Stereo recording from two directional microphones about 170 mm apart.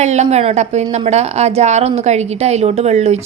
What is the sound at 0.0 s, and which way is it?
Speech, 40° right (ahead or behind).